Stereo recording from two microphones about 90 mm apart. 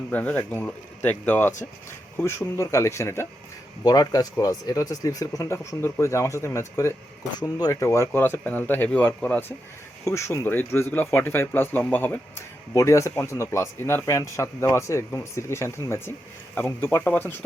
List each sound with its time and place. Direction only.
0.1 s speech: 20° left (ahead or behind)
3.8 s speech: 45° left (ahead or behind)
7.3 s speech: 45° left (ahead or behind); by 9.6 s 20° left (ahead or behind)
10.0 s speech: 30° left (ahead or behind)
12.7 s speech: 35° left (ahead or behind)